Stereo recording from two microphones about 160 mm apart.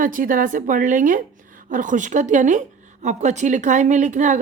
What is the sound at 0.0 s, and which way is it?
A woman's voice, 55° right (ahead or behind).